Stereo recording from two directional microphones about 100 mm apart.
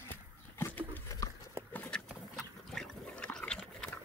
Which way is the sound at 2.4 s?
Centre (ahead or behind).